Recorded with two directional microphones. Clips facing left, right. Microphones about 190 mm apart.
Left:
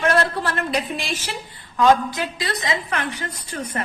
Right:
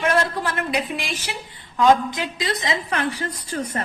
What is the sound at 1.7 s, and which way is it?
A woman's voice, 20° right (ahead or behind).